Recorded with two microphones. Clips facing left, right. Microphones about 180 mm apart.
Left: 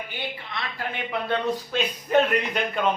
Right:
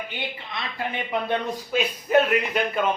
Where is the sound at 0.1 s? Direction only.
20° right (ahead or behind).